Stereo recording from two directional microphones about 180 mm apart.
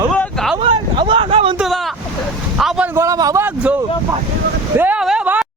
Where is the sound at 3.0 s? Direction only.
20° right (ahead or behind).